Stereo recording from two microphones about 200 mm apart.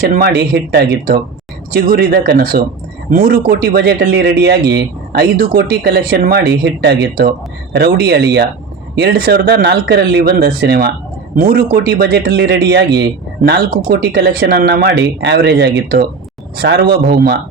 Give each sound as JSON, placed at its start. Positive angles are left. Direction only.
{"t": 0.1, "sound": "speech", "side_deg": -50}